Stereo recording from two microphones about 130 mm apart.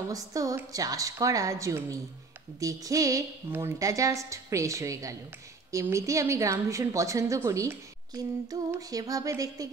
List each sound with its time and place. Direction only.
0.1 s a woman's voice: 25° right (ahead or behind)